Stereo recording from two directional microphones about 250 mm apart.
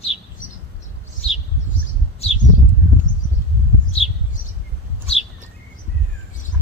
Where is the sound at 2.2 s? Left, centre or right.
Left.